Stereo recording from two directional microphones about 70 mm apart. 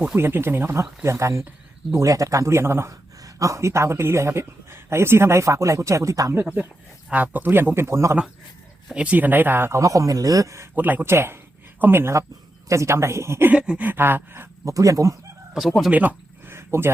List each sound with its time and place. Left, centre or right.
0.2 s speech: right
2.9 s speech: right
6.3 s speech: right
8.9 s speech: centre
9.8 s speech: right
10.8 s speech: right
12.6 s speech: right
13.5 s speech: centre
13.9 s speech: right
14.6 s speech: right
15.5 s speech: centre
15.9 s speech: right
16.5 s a sound: right